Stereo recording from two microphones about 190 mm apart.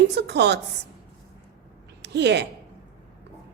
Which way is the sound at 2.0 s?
60° right (ahead or behind).